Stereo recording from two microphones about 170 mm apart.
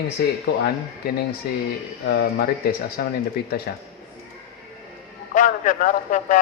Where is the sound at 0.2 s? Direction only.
70° left (ahead or behind).